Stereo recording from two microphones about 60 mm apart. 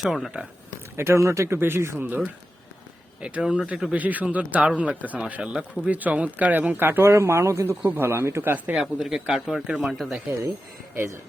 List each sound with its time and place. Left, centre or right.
0.0 s speech: centre
0.9 s a man's voice: right
1.5 s speech: right
2.0 s speech: right
3.2 s speech: right
5.9 s speech: right
7.0 s a man's voice: right
7.9 s speech: right
8.7 s speech: centre
10.9 s a man's voice: right